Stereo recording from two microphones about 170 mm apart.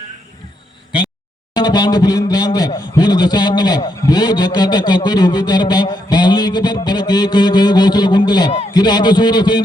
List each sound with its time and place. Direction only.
1.5 s a man's voice: 25° left (ahead or behind)